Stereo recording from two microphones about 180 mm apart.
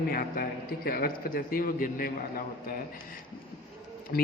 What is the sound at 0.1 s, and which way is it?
A man's voice, 55° left (ahead or behind).